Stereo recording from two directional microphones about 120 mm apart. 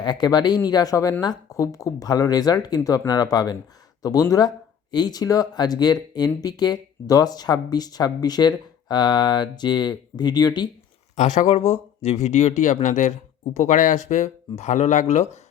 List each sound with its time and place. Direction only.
0.0 s speech: 35° left (ahead or behind)
11.2 s speech: 90° left
11.4 s speech: 55° left (ahead or behind)